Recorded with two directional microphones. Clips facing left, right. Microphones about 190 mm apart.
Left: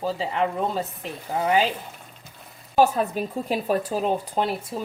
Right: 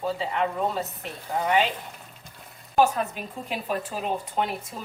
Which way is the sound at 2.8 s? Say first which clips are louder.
Left 3 dB; 40° left (ahead or behind).